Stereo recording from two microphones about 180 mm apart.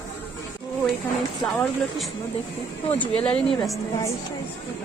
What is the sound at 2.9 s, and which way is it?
Speech, 10° left (ahead or behind).